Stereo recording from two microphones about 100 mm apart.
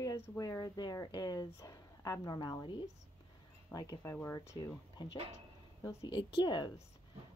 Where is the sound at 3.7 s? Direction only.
35° left (ahead or behind).